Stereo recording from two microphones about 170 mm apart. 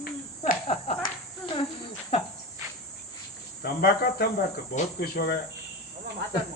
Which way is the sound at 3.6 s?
65° left (ahead or behind).